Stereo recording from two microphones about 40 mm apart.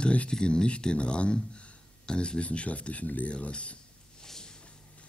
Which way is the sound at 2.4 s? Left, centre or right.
Left.